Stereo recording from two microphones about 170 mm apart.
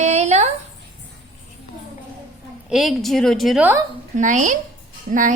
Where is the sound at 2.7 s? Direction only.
Centre (ahead or behind).